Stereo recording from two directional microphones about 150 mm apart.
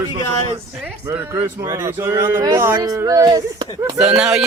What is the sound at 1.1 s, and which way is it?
Speech, 20° right (ahead or behind).